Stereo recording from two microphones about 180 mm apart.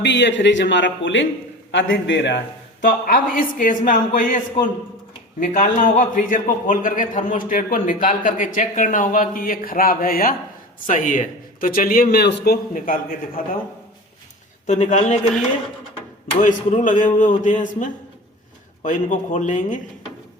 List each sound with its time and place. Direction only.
0.0 s speech: 75° left (ahead or behind)
2.8 s a man's voice: 50° left (ahead or behind)
5.4 s a man's voice: 45° left (ahead or behind)
14.7 s a man's voice: 40° left (ahead or behind)
16.3 s a man's voice: 40° left (ahead or behind)